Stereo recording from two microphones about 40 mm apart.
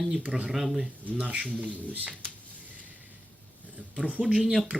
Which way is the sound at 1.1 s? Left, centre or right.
Right.